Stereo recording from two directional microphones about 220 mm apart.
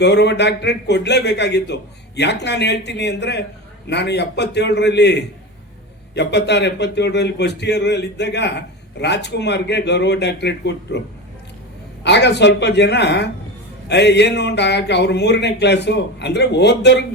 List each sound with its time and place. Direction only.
0.0 s a man's voice: 50° left (ahead or behind)
12.0 s a man's voice: 50° left (ahead or behind)